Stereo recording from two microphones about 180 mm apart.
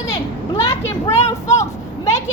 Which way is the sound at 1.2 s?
40° left (ahead or behind).